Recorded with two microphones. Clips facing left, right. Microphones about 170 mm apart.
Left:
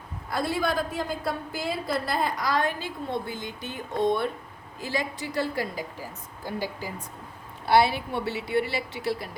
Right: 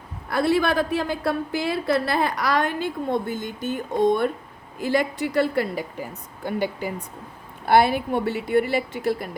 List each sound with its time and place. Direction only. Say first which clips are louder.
0.3 s a woman's voice: right 6 dB; 70° right (ahead or behind); by 4.3 s 45° right (ahead or behind)
4.8 s a woman's voice: right 8 dB; 60° right (ahead or behind)
7.6 s a woman's voice: right 3 dB; 50° right (ahead or behind)